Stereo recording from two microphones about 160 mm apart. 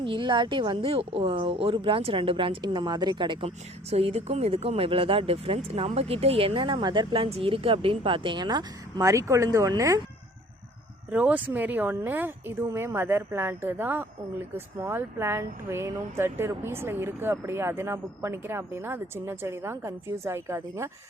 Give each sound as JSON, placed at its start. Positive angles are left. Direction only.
{"t": 0.0, "sound": "a woman's voice", "side_deg": -30}
{"t": 11.1, "sound": "speech", "side_deg": -10}